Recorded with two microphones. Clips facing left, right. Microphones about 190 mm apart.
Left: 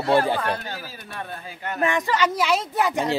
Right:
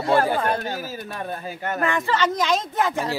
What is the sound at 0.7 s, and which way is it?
Speech, 45° right (ahead or behind).